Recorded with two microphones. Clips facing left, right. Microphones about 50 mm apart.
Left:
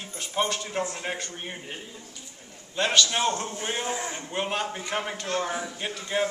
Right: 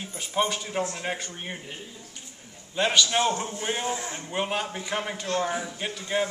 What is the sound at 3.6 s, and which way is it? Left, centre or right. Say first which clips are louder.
A man's voice: right 1 dB; centre.